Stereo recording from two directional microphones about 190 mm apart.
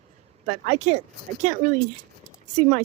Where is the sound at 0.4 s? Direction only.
40° right (ahead or behind).